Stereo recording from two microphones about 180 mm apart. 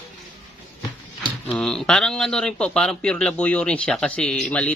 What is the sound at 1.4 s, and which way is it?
A man's voice, 5° left (ahead or behind).